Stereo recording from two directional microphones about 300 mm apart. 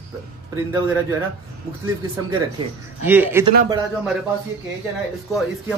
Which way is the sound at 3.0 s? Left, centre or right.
Centre.